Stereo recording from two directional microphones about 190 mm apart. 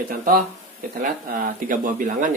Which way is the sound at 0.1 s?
50° right (ahead or behind).